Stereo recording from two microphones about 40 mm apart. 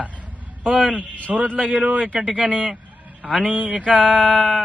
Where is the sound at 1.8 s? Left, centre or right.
Right.